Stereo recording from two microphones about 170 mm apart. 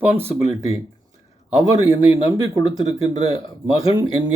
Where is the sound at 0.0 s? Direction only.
10° right (ahead or behind).